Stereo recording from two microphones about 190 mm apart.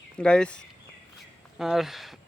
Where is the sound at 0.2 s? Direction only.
5° left (ahead or behind).